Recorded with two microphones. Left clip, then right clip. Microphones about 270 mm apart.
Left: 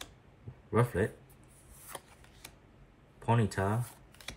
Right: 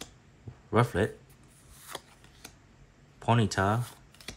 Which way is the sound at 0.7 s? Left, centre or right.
Centre.